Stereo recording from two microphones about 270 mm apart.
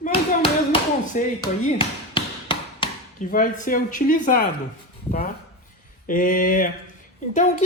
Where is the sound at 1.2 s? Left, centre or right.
Left.